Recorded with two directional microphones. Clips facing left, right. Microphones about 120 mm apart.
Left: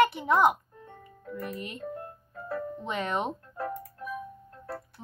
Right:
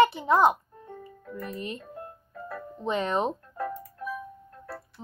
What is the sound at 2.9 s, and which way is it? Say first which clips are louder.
Speech: right 5 dB; 30° right (ahead or behind).